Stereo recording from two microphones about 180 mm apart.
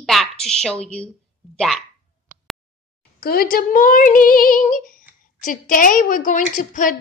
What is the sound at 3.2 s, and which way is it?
A woman's voice, 55° left (ahead or behind).